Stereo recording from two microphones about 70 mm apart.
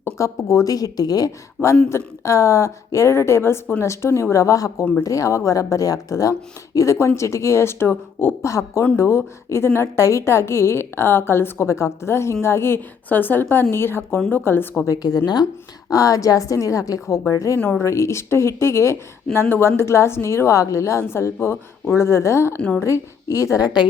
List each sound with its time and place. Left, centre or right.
0.0 s speech: left
0.7 s a woman's voice: left
1.9 s speech: left
8.4 s speech: left
14.8 s speech: left
15.9 s a woman's voice: left